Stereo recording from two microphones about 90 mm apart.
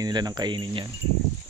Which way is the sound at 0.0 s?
50° right (ahead or behind).